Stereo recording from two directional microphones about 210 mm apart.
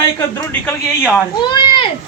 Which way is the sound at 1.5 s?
20° left (ahead or behind).